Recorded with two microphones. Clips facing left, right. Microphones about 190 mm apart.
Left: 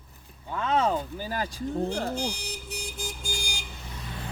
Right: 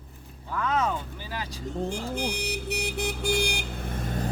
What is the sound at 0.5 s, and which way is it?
Speech, 30° left (ahead or behind).